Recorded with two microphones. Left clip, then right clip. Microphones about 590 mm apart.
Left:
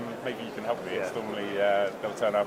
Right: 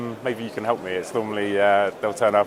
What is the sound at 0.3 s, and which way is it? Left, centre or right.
A man's voice, right.